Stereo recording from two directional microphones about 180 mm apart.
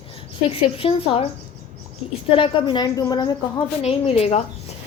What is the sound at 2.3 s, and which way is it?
A woman's voice, 30° left (ahead or behind).